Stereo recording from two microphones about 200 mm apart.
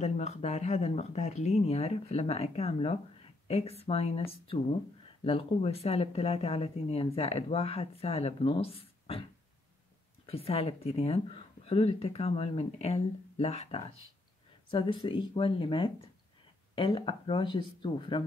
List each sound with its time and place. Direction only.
0.0 s speech: 35° left (ahead or behind)
10.2 s speech: 30° left (ahead or behind)